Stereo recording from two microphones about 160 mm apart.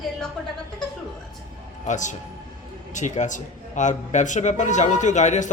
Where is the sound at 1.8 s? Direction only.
50° left (ahead or behind).